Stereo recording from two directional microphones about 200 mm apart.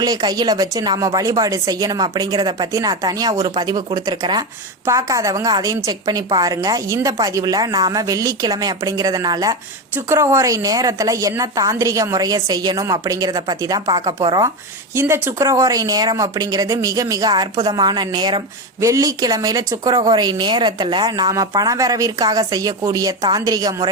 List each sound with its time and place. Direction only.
0.0 s a woman's voice: 20° right (ahead or behind)